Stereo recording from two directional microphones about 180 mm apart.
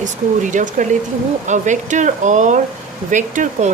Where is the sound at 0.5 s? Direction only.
45° right (ahead or behind).